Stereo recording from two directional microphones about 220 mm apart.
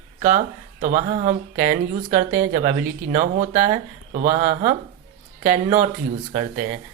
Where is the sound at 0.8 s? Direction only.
35° right (ahead or behind).